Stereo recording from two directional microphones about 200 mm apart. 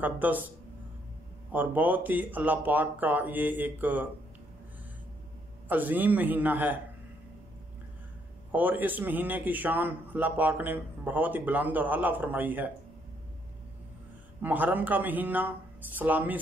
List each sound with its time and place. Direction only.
0.0 s a man's voice: 10° right (ahead or behind)
1.5 s a man's voice: 10° right (ahead or behind)
5.7 s a man's voice: 10° right (ahead or behind)
8.5 s a man's voice: 10° right (ahead or behind)
14.4 s a man's voice: 10° right (ahead or behind)